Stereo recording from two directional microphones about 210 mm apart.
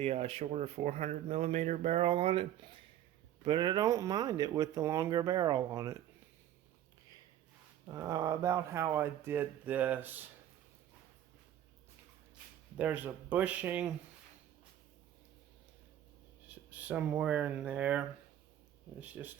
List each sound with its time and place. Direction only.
0.0 s speech: 30° right (ahead or behind)
7.9 s speech: 15° right (ahead or behind)
12.7 s speech: 5° right (ahead or behind)
16.7 s speech: 5° right (ahead or behind)
19.2 s speech: 5° right (ahead or behind)